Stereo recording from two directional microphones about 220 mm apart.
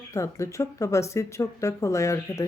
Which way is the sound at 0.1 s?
15° left (ahead or behind).